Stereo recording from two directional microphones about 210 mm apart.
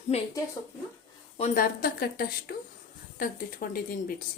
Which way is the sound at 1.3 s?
35° left (ahead or behind).